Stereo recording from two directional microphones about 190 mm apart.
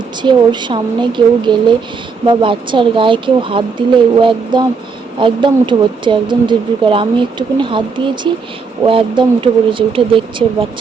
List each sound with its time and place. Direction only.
0.2 s speech: 25° right (ahead or behind)